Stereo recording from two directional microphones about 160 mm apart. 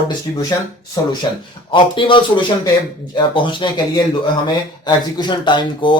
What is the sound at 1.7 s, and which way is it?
Speech, 30° left (ahead or behind).